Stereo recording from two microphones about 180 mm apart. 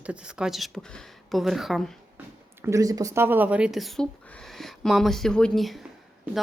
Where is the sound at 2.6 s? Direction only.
15° right (ahead or behind).